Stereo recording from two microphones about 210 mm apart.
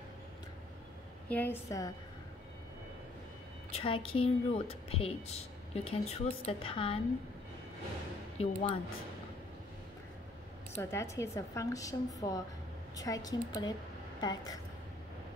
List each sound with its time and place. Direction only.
1.3 s speech: 10° left (ahead or behind)
3.7 s a woman's voice: 25° left (ahead or behind)
8.4 s a woman's voice: 25° left (ahead or behind)
10.7 s speech: 10° left (ahead or behind)